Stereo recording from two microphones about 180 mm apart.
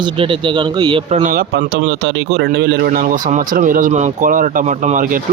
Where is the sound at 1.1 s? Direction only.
45° right (ahead or behind).